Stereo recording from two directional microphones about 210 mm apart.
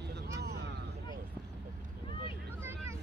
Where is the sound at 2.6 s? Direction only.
10° right (ahead or behind).